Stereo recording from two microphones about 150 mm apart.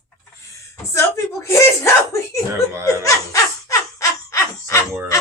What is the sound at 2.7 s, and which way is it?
Laughter, 15° right (ahead or behind).